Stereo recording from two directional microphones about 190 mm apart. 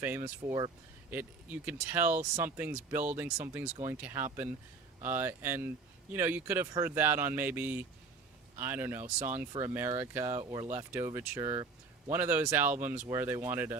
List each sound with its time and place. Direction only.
0.0 s speech: 10° right (ahead or behind)
1.1 s speech: 10° right (ahead or behind)